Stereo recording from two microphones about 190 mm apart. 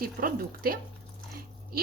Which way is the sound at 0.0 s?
50° right (ahead or behind).